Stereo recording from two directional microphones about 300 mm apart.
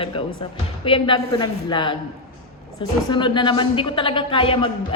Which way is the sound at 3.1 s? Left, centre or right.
Centre.